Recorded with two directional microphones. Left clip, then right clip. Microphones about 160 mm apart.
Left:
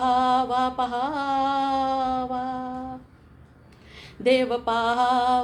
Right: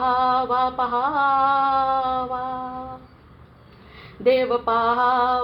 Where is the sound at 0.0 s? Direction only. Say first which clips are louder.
Right 1 dB; 35° left (ahead or behind).